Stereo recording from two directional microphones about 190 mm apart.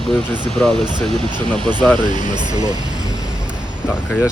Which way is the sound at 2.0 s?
40° left (ahead or behind).